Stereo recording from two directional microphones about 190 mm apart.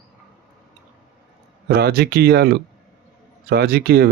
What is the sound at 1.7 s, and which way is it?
Speech, 55° right (ahead or behind).